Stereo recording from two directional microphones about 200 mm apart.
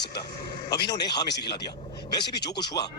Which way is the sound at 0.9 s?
20° left (ahead or behind).